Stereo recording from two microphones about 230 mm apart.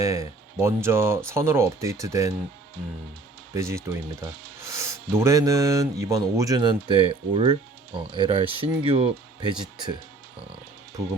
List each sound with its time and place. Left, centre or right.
0.0 s speech: centre
3.5 s speech: centre
4.8 s speech: centre